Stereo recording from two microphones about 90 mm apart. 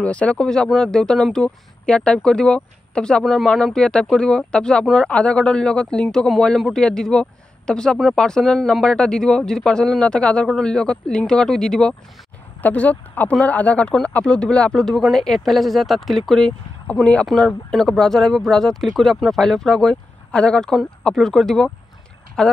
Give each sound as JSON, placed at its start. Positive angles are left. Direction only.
{"t": 0.0, "sound": "speech", "side_deg": 15}